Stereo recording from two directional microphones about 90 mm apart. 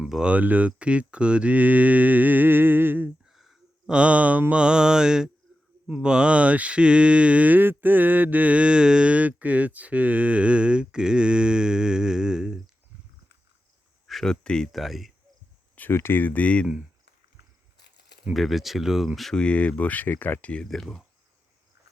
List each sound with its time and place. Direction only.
0.0 s speech: 10° right (ahead or behind)
3.2 s a sound: centre (ahead or behind)
3.9 s speech: 15° right (ahead or behind)
14.1 s speech: 5° left (ahead or behind)
15.7 s speech: 25° left (ahead or behind)
18.3 s speech: centre (ahead or behind)